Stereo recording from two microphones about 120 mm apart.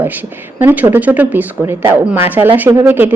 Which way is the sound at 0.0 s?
15° right (ahead or behind).